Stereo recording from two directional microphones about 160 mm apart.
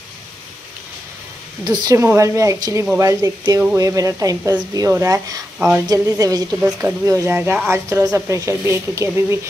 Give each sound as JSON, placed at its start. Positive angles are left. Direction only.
{"t": 1.6, "sound": "a woman's voice", "side_deg": -25}